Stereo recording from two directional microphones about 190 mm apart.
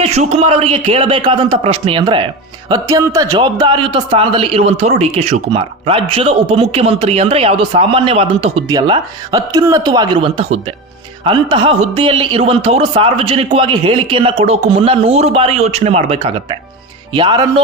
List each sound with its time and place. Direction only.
0.0 s a man's voice: 35° right (ahead or behind)